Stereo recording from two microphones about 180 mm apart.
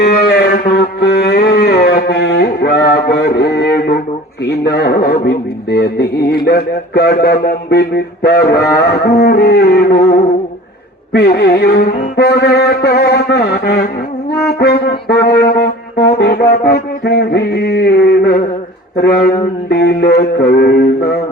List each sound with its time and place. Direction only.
0.0 s a sound: 65° left (ahead or behind)
0.7 s music: 65° left (ahead or behind)
4.4 s speech: 65° left (ahead or behind)
14.4 s music: 65° left (ahead or behind)
18.9 s speech: 60° left (ahead or behind)